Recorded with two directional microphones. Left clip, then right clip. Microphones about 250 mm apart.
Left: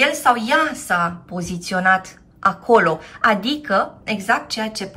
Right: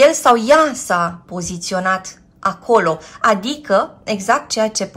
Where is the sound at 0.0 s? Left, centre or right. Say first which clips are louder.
Right 5 dB; centre.